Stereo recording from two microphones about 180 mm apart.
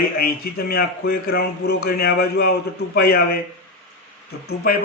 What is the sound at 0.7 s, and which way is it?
Speech, 55° left (ahead or behind).